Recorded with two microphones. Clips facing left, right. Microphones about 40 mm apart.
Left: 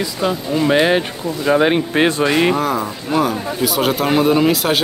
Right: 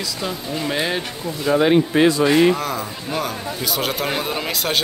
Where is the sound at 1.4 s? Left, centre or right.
Left.